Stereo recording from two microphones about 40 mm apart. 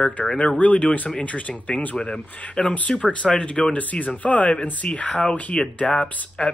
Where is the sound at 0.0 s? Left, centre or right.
Centre.